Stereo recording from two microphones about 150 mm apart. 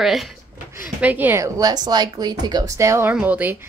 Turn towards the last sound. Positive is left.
turn(degrees=-10)  # may be behind; listen again after turning